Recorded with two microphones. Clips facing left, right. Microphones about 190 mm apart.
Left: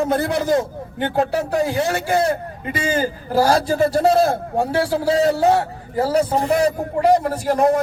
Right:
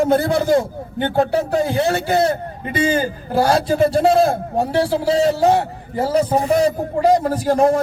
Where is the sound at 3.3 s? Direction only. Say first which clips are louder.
Right 1 dB; 25° right (ahead or behind).